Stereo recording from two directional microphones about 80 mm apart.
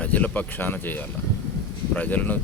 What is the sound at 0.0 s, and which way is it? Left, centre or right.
Speech, centre.